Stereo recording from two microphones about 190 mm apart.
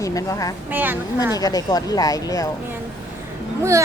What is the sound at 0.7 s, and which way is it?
Speech, 10° right (ahead or behind).